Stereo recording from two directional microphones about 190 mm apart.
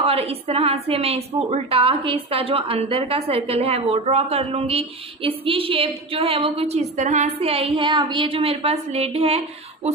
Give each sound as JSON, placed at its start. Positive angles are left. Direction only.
{"t": 0.0, "sound": "a woman's voice", "side_deg": -30}